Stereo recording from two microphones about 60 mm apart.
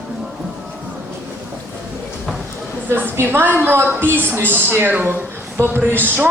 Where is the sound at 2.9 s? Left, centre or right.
Right.